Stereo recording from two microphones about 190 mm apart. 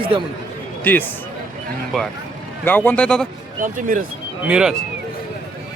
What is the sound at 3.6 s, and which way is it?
Speech, 45° right (ahead or behind).